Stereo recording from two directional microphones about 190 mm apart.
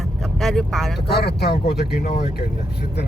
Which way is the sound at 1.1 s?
60° left (ahead or behind).